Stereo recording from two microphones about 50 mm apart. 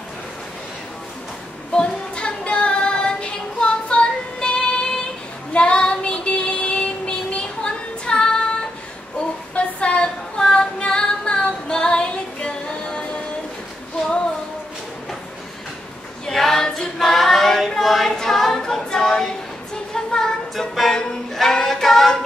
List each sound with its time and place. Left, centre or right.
1.7 s child singing: centre
9.6 s female singing: left
16.3 s female singing: centre
19.9 s music: centre
20.7 s a sound: centre